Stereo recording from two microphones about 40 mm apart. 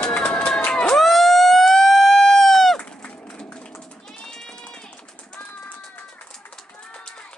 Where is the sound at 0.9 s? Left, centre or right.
Centre.